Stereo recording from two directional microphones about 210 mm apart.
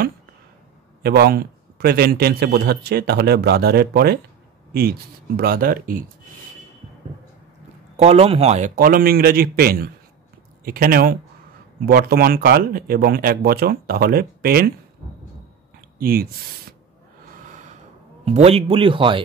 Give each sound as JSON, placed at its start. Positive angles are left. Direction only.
{"t": 1.0, "sound": "a man's voice", "side_deg": -50}
{"t": 5.4, "sound": "a man's voice", "side_deg": -45}
{"t": 8.0, "sound": "a man's voice", "side_deg": -30}
{"t": 16.0, "sound": "a man's voice", "side_deg": -45}
{"t": 17.5, "sound": "gasp", "side_deg": -35}
{"t": 18.2, "sound": "speech", "side_deg": -30}